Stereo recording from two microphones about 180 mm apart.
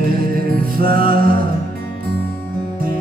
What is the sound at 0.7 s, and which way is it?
Music, 55° right (ahead or behind).